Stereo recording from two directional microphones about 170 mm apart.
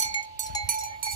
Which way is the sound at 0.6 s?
55° right (ahead or behind).